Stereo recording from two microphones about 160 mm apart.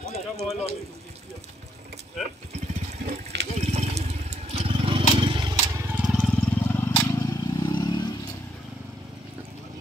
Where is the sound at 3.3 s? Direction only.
90° right.